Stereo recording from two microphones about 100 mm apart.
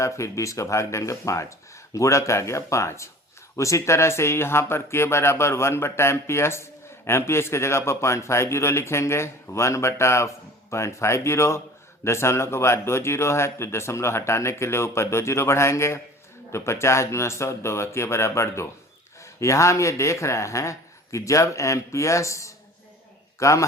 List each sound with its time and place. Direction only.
0.0 s speech: 30° left (ahead or behind)